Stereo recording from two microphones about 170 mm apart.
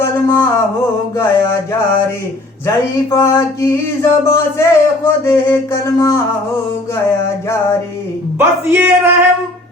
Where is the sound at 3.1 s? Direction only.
20° left (ahead or behind).